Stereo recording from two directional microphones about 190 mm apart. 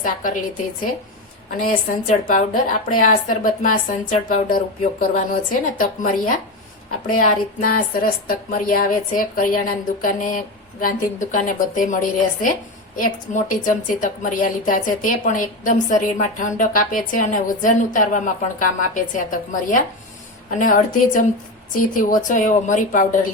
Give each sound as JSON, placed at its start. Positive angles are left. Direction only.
{"t": 0.0, "sound": "speech", "side_deg": 45}
{"t": 1.5, "sound": "a woman's voice", "side_deg": 45}
{"t": 7.2, "sound": "speech", "side_deg": 45}